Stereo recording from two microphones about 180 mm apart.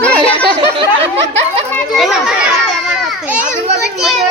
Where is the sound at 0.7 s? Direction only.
30° right (ahead or behind).